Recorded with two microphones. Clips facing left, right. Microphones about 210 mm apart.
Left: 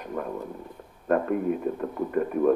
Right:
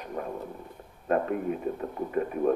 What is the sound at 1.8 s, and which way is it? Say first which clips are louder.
Speech: left 3 dB; 50° left (ahead or behind).